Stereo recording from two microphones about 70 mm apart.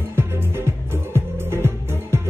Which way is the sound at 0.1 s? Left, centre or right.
Right.